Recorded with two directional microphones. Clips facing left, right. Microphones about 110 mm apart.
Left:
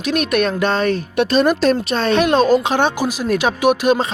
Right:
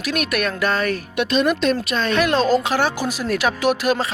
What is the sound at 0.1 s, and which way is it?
Speech, 25° left (ahead or behind).